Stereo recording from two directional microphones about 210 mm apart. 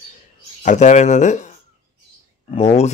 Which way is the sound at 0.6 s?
35° left (ahead or behind).